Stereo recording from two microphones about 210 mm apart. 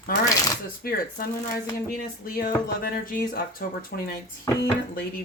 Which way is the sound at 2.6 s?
45° left (ahead or behind).